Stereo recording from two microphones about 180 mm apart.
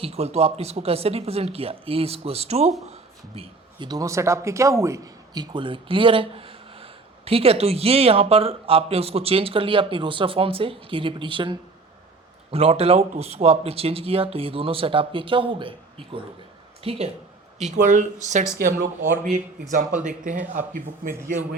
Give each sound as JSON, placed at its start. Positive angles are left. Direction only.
{"t": 0.0, "sound": "speech", "side_deg": -35}
{"t": 17.6, "sound": "speech", "side_deg": -45}
{"t": 20.0, "sound": "speech", "side_deg": -45}